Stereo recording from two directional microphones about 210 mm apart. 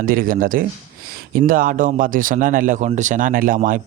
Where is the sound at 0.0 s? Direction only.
40° right (ahead or behind).